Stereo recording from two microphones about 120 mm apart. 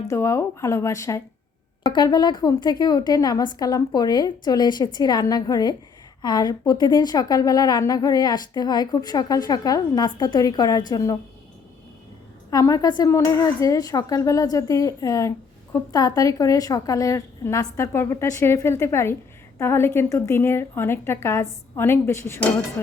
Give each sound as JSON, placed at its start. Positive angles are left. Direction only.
{"t": 0.1, "sound": "a woman's voice", "side_deg": 25}
{"t": 1.8, "sound": "a woman's voice", "side_deg": 35}
{"t": 12.5, "sound": "a woman's voice", "side_deg": 30}